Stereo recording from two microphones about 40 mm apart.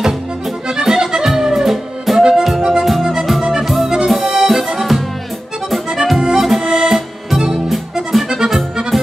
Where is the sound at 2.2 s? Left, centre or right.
Centre.